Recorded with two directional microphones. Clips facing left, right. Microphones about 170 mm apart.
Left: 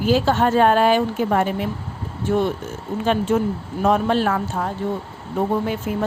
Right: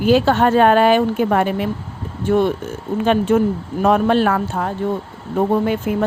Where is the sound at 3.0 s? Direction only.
65° right (ahead or behind).